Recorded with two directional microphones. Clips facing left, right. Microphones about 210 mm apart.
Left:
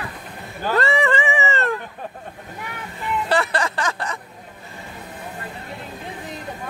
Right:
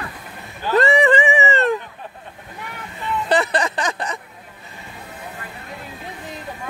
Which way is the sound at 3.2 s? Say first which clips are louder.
Right 3 dB; 20° right (ahead or behind).